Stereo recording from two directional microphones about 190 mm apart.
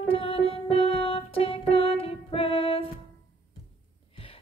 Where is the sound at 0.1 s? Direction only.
30° left (ahead or behind).